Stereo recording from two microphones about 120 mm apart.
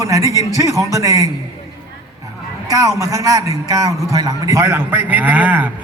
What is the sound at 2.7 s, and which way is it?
A man's voice, 30° right (ahead or behind).